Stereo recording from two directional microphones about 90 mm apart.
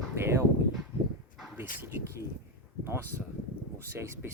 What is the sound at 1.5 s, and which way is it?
Speech, 25° right (ahead or behind).